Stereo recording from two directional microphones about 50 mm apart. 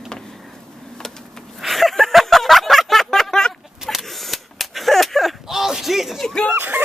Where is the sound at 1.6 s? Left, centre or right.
Centre.